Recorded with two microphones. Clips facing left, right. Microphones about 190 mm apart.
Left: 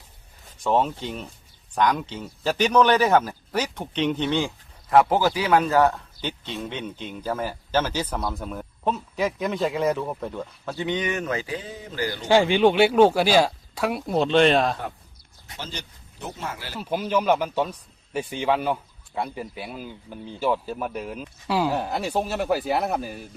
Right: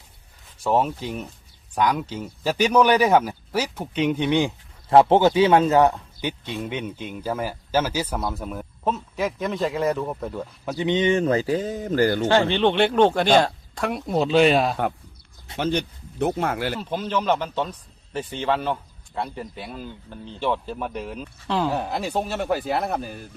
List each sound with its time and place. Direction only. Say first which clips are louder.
0.6 s speech: right 1 dB; 10° right (ahead or behind)
4.9 s a man's voice: right 4 dB; 30° right (ahead or behind); by 10.4 s centre (ahead or behind)
10.7 s a man's voice: right 6 dB; 20° right (ahead or behind); by 12.2 s 50° right (ahead or behind)
12.3 s speech: left 1 dB; 10° left (ahead or behind); by 14.8 s 5° right (ahead or behind)
15.5 s speech: right 13 dB; 65° right (ahead or behind)
16.7 s speech: left 1 dB; 10° left (ahead or behind)